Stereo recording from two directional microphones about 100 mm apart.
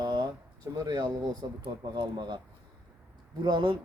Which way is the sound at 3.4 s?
50° right (ahead or behind).